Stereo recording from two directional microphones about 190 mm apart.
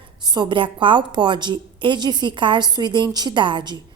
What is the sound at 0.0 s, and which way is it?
A woman's voice, 25° right (ahead or behind).